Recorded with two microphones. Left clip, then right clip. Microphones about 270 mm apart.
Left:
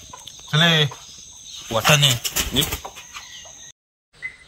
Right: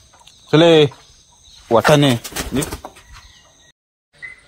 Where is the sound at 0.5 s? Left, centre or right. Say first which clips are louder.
Right 7 dB; right.